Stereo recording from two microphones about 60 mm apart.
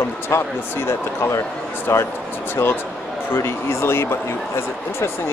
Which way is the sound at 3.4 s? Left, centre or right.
Left.